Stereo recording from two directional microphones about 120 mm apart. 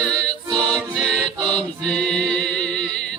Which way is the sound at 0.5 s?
5° left (ahead or behind).